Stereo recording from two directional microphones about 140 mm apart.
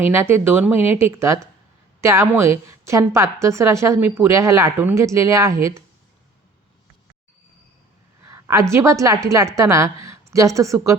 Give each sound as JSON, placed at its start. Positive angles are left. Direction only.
{"t": 0.1, "sound": "a woman's voice", "side_deg": -15}
{"t": 8.3, "sound": "a sound", "side_deg": -20}
{"t": 8.7, "sound": "a woman's voice", "side_deg": -20}